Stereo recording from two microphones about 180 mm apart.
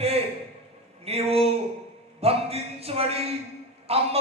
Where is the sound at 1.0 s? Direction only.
35° right (ahead or behind).